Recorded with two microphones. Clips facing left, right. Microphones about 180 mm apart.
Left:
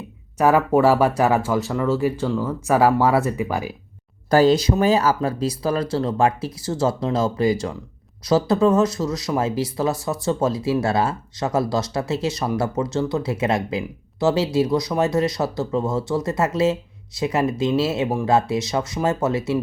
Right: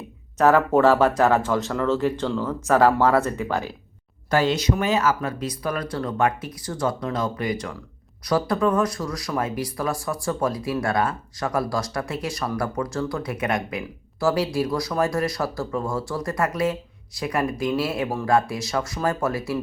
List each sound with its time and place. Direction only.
0.3 s speech: 10° left (ahead or behind)
4.3 s speech: 35° left (ahead or behind)